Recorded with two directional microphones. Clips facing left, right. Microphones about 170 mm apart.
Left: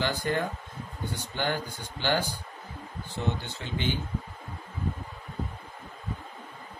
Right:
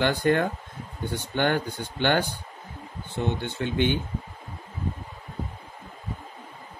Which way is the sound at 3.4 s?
60° right (ahead or behind).